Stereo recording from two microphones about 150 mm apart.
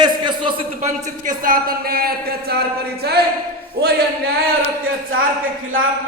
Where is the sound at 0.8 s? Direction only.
65° right (ahead or behind); by 3.2 s 90° right.